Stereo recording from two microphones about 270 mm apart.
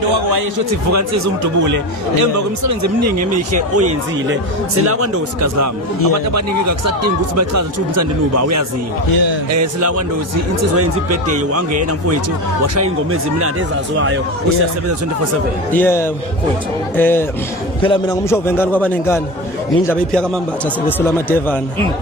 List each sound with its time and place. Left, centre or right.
0.9 s a man's voice: right
2.6 s speech: right
4.9 s a man's voice: right
10.8 s a man's voice: right
15.7 s a man's voice: centre